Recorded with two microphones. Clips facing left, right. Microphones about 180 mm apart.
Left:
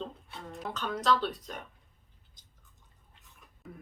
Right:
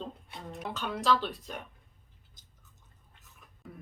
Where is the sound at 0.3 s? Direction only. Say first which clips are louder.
Even; 15° right (ahead or behind).